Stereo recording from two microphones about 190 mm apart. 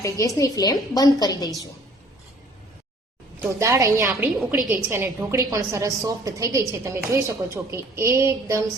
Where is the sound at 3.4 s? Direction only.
15° right (ahead or behind).